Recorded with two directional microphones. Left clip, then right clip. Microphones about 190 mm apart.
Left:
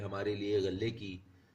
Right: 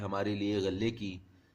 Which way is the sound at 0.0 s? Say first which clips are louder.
Right 3 dB; 50° right (ahead or behind).